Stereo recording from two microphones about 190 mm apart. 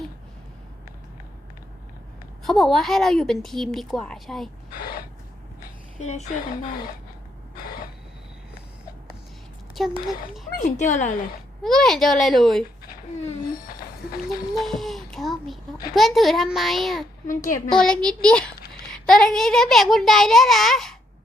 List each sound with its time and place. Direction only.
2.5 s a woman's voice: centre (ahead or behind)
4.8 s a woman's voice: 50° left (ahead or behind)
6.0 s speech: 35° left (ahead or behind)
9.8 s speech: centre (ahead or behind)
10.6 s speech: 40° left (ahead or behind)
11.6 s a woman's voice: centre (ahead or behind)
14.5 s a child's voice: centre (ahead or behind)
17.2 s a woman's voice: 45° left (ahead or behind)
17.7 s a woman's voice: 5° left (ahead or behind)